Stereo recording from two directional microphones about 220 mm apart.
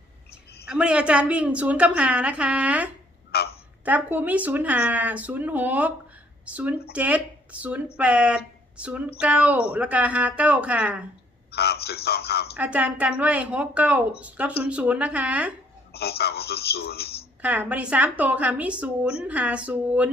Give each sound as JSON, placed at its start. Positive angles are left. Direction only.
{"t": 0.7, "sound": "a woman's voice", "side_deg": -5}
{"t": 3.3, "sound": "a sound", "side_deg": 45}
{"t": 3.8, "sound": "a woman's voice", "side_deg": -10}
{"t": 11.5, "sound": "a man's voice", "side_deg": 45}
{"t": 12.5, "sound": "a woman's voice", "side_deg": -5}
{"t": 15.9, "sound": "a man's voice", "side_deg": 45}
{"t": 17.4, "sound": "speech", "side_deg": -5}